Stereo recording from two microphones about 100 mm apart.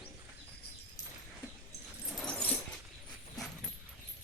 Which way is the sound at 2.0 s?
Centre (ahead or behind).